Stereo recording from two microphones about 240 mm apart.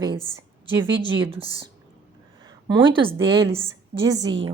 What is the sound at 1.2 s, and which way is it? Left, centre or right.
A woman's voice, right.